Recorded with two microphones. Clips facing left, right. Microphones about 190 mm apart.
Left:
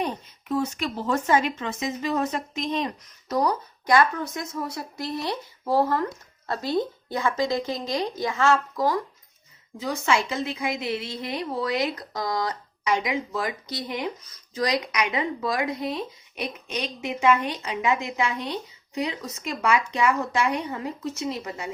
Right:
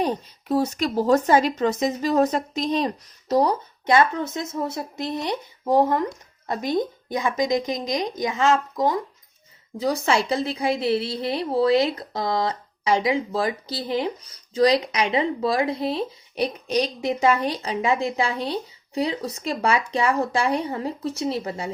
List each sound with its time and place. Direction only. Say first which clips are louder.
0.0 s a woman's voice: right 5 dB; 35° right (ahead or behind); by 9.0 s 20° right (ahead or behind)
9.7 s a woman's voice: right 3 dB; 35° right (ahead or behind)